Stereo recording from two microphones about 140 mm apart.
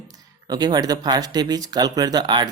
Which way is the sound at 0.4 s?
30° right (ahead or behind).